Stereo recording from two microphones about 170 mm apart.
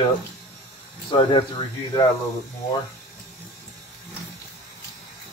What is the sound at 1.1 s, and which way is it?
Speech, 30° left (ahead or behind).